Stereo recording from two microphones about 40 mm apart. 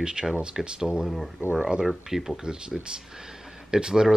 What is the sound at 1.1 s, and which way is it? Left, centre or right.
Speech, centre.